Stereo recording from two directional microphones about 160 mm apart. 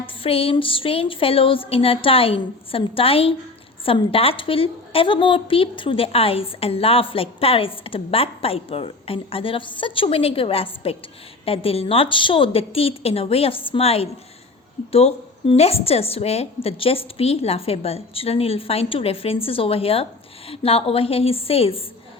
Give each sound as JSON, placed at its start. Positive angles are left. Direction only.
{"t": 0.0, "sound": "a woman's voice", "side_deg": 35}